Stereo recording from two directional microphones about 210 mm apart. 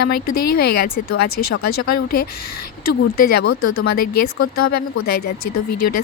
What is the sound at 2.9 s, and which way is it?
Speech, 45° left (ahead or behind).